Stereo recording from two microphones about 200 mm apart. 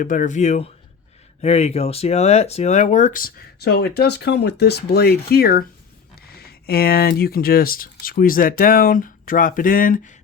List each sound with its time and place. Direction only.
0.0 s speech: 40° left (ahead or behind)